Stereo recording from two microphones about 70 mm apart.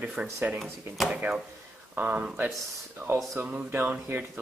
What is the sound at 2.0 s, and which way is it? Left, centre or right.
Speech, right.